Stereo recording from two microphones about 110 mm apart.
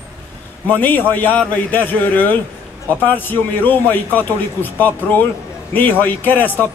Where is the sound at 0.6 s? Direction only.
15° left (ahead or behind).